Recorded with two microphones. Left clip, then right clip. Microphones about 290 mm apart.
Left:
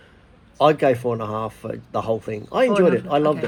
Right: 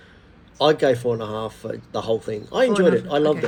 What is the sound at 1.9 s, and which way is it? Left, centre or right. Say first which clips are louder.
A man's voice: even; left.